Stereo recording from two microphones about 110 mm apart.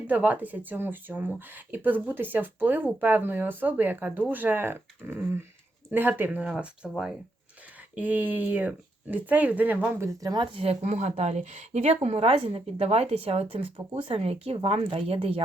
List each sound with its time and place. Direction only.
0.1 s speech: 15° right (ahead or behind); by 10.4 s 35° right (ahead or behind)
10.4 s a woman's voice: 55° right (ahead or behind)